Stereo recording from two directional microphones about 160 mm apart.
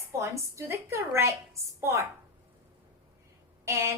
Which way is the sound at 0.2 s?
15° right (ahead or behind).